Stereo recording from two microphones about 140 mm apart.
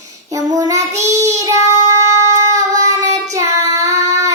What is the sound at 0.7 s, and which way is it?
Child singing, 20° right (ahead or behind).